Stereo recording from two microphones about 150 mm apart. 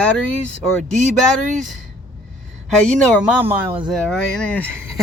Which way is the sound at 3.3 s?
10° right (ahead or behind).